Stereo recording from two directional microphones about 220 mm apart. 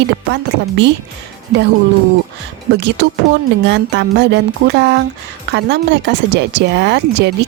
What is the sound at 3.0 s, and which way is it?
Speech, 50° right (ahead or behind).